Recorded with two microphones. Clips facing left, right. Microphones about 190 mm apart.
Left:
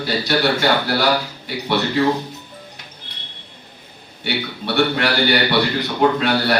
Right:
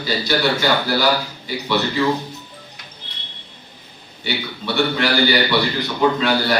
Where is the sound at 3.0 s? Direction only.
50° left (ahead or behind).